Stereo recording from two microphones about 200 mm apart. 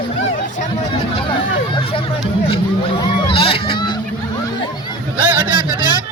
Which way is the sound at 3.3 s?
25° left (ahead or behind).